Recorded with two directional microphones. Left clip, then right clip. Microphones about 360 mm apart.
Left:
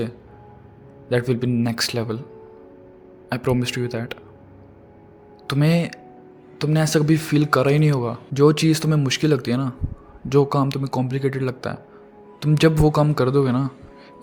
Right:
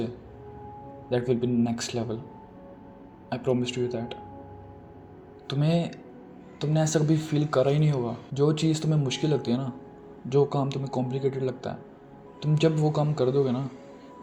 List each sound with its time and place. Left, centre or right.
1.1 s speech: left
3.2 s speech: left
5.5 s speech: left